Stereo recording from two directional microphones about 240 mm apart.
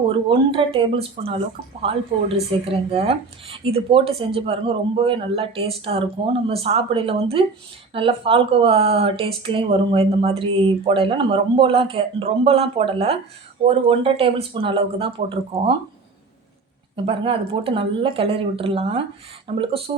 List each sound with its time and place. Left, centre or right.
0.3 s speech: right
17.1 s speech: right